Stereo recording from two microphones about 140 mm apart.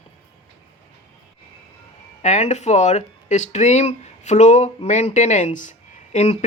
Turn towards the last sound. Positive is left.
turn(degrees=55)  # may be behind; listen again after turning